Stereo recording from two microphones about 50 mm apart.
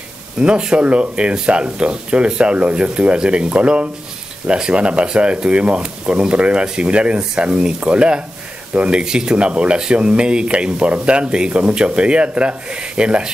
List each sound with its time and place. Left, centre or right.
0.4 s speech: centre
9.0 s speech: centre